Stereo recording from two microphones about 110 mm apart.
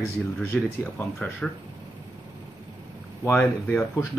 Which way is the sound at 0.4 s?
20° left (ahead or behind).